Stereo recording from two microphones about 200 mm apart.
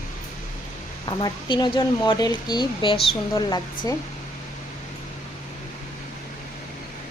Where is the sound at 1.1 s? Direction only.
25° left (ahead or behind).